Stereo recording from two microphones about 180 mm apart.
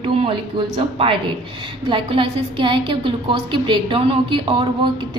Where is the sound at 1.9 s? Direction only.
30° right (ahead or behind).